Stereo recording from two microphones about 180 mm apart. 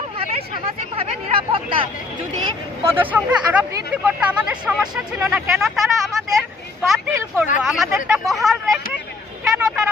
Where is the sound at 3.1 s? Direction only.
5° right (ahead or behind).